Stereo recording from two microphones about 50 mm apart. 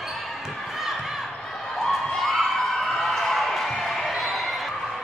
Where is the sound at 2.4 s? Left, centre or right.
Centre.